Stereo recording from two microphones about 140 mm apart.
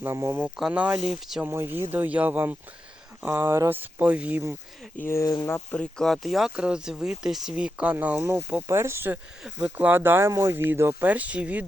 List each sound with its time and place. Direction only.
0.0 s speech: 20° right (ahead or behind)
0.4 s speech: 5° right (ahead or behind)
1.5 s speech: 15° right (ahead or behind)
4.9 s speech: 20° left (ahead or behind)
5.7 s speech: 5° left (ahead or behind); by 9.1 s 15° right (ahead or behind)
9.4 s speech: 5° right (ahead or behind)